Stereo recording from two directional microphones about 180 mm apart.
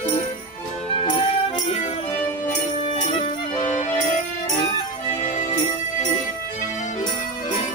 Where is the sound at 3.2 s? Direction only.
40° left (ahead or behind).